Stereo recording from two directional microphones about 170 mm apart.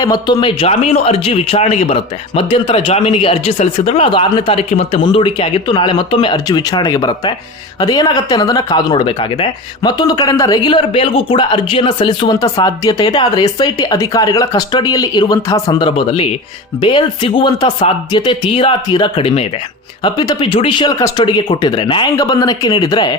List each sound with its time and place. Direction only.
0.0 s a man's voice: 20° left (ahead or behind)